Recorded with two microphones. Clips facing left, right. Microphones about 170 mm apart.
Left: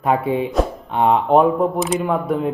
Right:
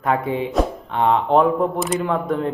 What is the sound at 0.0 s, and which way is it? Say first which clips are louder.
A man's voice: left 2 dB; 15° left (ahead or behind).